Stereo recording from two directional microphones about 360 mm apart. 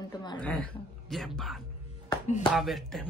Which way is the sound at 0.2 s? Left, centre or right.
Centre.